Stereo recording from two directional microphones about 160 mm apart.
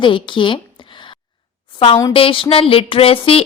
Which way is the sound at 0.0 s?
30° left (ahead or behind).